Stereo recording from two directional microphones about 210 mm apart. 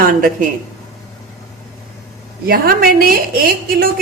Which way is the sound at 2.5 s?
45° right (ahead or behind).